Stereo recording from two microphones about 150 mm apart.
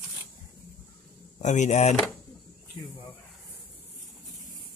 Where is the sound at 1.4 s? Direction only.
50° left (ahead or behind).